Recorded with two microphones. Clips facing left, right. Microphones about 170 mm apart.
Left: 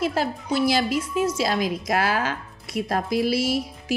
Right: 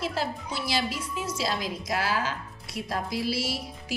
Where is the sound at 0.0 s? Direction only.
55° left (ahead or behind).